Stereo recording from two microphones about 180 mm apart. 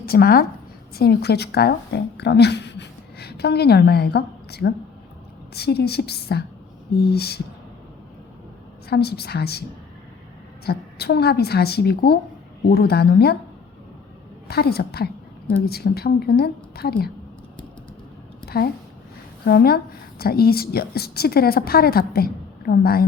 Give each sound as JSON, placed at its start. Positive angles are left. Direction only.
{"t": 0.0, "sound": "a woman's voice", "side_deg": 60}
{"t": 8.9, "sound": "a woman's voice", "side_deg": 60}
{"t": 10.7, "sound": "a woman's voice", "side_deg": 65}
{"t": 14.4, "sound": "a woman's voice", "side_deg": 60}
{"t": 18.4, "sound": "a woman's voice", "side_deg": 60}